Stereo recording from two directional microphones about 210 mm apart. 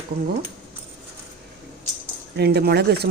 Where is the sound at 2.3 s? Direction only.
50° right (ahead or behind).